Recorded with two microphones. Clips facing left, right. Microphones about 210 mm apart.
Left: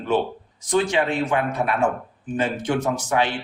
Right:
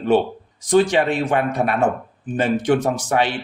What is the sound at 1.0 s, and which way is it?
Speech, 35° right (ahead or behind).